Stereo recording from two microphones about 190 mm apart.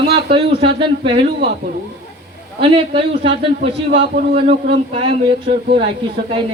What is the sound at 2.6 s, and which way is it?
A man's voice, 30° right (ahead or behind).